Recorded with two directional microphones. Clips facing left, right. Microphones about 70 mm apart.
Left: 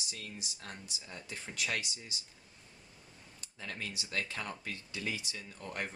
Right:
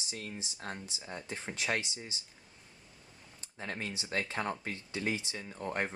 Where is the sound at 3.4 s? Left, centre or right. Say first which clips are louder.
Right 3 dB; right.